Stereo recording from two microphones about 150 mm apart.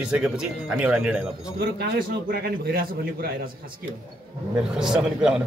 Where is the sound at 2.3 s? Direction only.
80° right.